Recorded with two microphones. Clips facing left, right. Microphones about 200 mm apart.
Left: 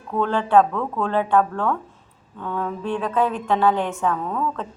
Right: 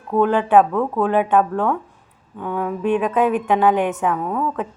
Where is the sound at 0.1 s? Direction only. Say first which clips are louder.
Right 3 dB; 15° right (ahead or behind).